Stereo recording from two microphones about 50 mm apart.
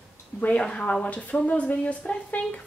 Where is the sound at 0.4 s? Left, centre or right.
Left.